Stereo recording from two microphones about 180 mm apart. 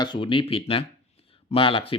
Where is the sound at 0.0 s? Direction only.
25° left (ahead or behind).